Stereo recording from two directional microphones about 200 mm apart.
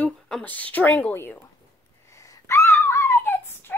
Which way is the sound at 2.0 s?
15° left (ahead or behind).